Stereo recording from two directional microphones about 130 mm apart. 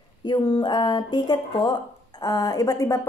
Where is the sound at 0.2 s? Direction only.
35° left (ahead or behind).